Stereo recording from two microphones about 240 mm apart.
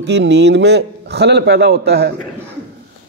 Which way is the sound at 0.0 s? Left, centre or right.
Right.